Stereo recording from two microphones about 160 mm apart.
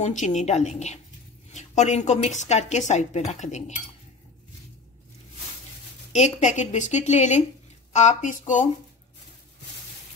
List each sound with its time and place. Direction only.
0.0 s a woman's voice: 50° left (ahead or behind)
6.1 s a woman's voice: 45° left (ahead or behind)